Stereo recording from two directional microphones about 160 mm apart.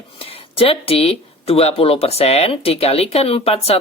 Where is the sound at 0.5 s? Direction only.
35° left (ahead or behind).